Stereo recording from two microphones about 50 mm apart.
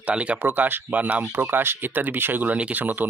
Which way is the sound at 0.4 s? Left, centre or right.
Right.